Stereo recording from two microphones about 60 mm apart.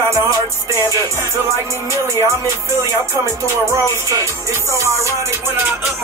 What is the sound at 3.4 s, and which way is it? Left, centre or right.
Music, right.